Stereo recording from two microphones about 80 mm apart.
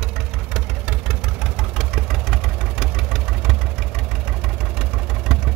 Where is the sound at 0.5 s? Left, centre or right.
Centre.